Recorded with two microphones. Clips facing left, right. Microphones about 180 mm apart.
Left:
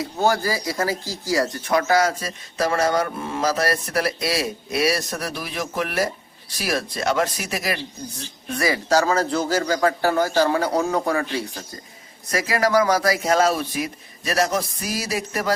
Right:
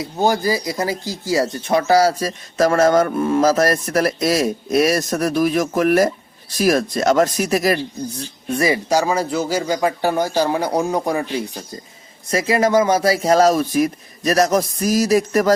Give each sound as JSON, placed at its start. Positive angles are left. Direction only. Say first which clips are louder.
{"t": 0.0, "sound": "speech", "louder": "right 3 dB", "side_deg": -15}
{"t": 8.2, "sound": "speech", "louder": "right 4 dB", "side_deg": -25}